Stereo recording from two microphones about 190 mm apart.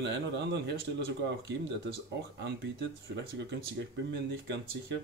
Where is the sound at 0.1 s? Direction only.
65° right (ahead or behind).